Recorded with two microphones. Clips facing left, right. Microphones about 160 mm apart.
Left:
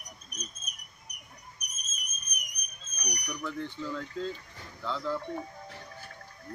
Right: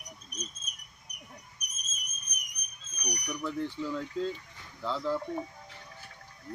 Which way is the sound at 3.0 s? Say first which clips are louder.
Right 2 dB; 20° right (ahead or behind).